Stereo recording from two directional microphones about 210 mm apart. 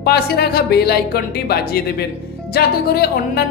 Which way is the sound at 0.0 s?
50° left (ahead or behind).